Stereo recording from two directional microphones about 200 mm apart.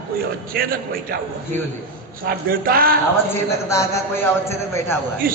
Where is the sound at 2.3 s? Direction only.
50° right (ahead or behind).